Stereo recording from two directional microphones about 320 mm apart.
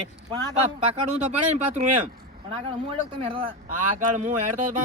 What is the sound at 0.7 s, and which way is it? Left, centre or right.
Speech, right.